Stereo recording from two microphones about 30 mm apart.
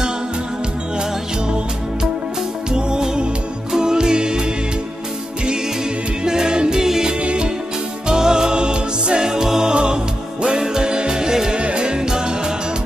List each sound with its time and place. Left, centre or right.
2.7 s music: right
6.2 s music: right
7.2 s music: right
8.1 s music: right
11.5 s music: right